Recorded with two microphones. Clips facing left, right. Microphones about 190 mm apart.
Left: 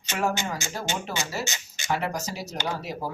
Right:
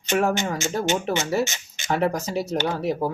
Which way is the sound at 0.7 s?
60° right (ahead or behind).